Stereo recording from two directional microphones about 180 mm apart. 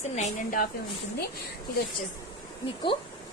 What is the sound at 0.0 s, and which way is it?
Speech, 40° left (ahead or behind).